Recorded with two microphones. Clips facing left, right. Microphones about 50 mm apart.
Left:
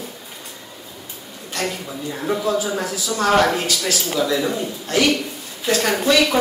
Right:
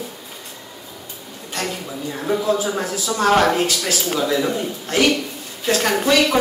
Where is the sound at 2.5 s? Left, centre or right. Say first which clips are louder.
Even; right.